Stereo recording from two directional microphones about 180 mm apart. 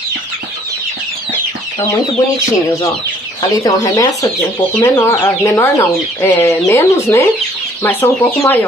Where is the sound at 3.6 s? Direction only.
20° left (ahead or behind).